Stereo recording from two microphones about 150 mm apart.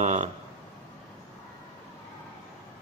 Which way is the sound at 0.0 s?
40° right (ahead or behind).